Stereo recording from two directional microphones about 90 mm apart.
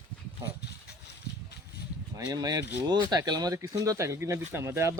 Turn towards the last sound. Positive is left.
turn(degrees=-30)  # may be behind; listen again after turning